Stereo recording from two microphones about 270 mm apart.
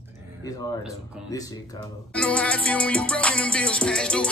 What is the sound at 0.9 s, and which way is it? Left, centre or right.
Speech, centre.